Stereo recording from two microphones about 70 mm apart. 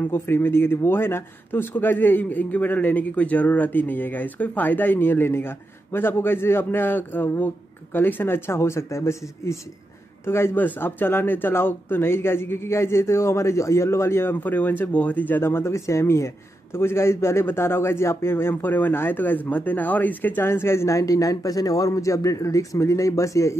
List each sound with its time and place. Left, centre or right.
0.1 s a man's voice: left
14.3 s a man's voice: left
21.0 s a man's voice: left